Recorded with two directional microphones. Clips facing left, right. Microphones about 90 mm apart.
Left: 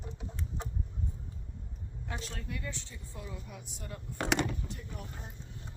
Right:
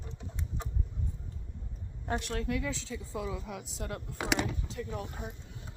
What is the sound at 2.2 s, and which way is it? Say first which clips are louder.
Speech: right 10 dB; 75° right (ahead or behind).